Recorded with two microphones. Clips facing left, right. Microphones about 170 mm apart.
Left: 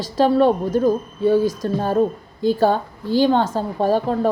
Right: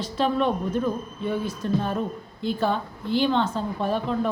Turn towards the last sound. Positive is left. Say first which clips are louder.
# left 7 dB
turn(degrees=40)  # may be behind; listen again after turning